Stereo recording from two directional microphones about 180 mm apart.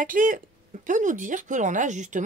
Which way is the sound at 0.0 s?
50° right (ahead or behind).